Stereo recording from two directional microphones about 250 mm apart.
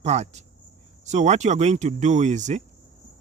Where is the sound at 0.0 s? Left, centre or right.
Right.